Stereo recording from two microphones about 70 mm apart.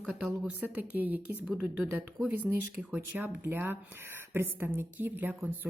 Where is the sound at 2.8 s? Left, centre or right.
Right.